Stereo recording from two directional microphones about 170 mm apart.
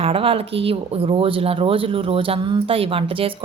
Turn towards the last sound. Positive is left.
turn(degrees=-35)  # may be behind; listen again after turning